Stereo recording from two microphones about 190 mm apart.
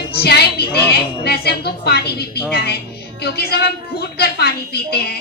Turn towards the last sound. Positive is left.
turn(degrees=55)  # may be behind; listen again after turning